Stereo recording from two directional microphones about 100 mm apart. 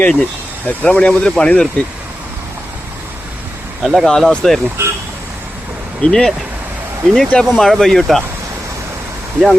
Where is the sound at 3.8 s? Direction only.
Centre (ahead or behind).